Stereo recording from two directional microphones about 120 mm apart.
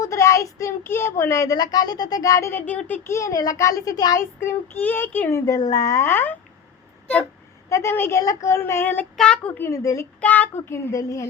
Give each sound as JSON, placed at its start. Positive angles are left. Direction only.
{"t": 0.0, "sound": "speech", "side_deg": 25}
{"t": 4.4, "sound": "child singing", "side_deg": 20}
{"t": 5.5, "sound": "speech", "side_deg": 30}
{"t": 7.7, "sound": "speech", "side_deg": 20}
{"t": 9.1, "sound": "child singing", "side_deg": 10}
{"t": 9.6, "sound": "speech", "side_deg": 25}
{"t": 10.2, "sound": "speech", "side_deg": 10}